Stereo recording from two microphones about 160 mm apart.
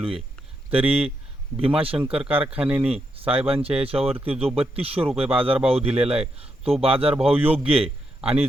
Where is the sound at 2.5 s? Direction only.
10° right (ahead or behind).